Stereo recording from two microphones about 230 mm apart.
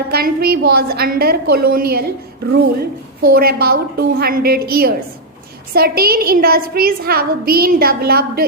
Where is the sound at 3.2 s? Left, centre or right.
Right.